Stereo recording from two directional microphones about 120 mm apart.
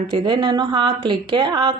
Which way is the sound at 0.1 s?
40° right (ahead or behind).